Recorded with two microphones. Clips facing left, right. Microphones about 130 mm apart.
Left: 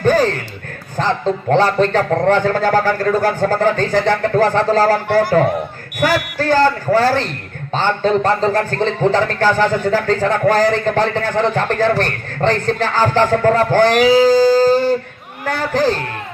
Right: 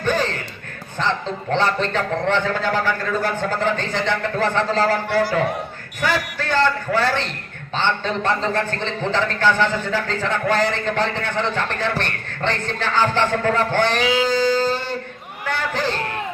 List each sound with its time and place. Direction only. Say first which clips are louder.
0.0 s music: left 7 dB; 40° left (ahead or behind)
0.9 s a man's voice: left 6 dB; 40° left (ahead or behind)